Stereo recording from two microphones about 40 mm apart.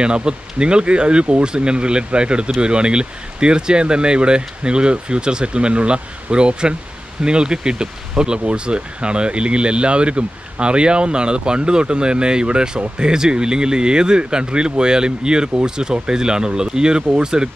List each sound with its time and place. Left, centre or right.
0.0 s speech: right